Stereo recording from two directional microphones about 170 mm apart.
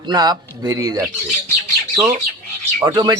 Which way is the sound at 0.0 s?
25° right (ahead or behind).